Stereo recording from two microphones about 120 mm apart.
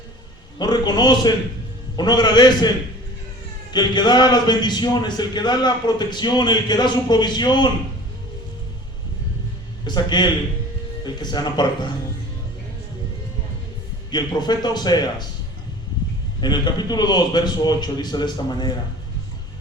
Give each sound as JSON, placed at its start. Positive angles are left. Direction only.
{"t": 0.6, "sound": "a man's voice", "side_deg": 35}
{"t": 9.8, "sound": "a man's voice", "side_deg": 40}
{"t": 14.1, "sound": "a man's voice", "side_deg": 35}
{"t": 16.4, "sound": "a man's voice", "side_deg": 35}